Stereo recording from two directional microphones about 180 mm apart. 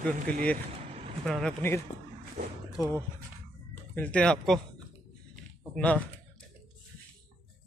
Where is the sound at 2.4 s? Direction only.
60° right (ahead or behind).